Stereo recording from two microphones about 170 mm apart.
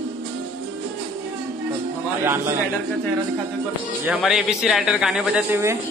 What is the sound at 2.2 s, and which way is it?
Speech, 15° right (ahead or behind).